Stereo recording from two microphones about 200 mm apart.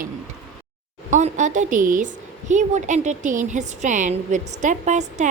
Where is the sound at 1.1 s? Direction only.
35° right (ahead or behind).